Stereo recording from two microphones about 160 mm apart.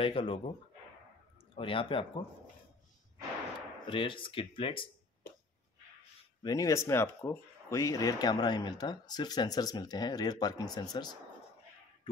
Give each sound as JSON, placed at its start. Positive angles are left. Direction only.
{"t": 0.0, "sound": "speech", "side_deg": 35}
{"t": 3.8, "sound": "speech", "side_deg": 30}
{"t": 6.4, "sound": "speech", "side_deg": 20}